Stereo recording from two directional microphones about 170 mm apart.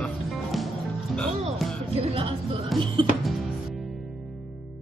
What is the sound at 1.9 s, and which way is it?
Music, 35° right (ahead or behind).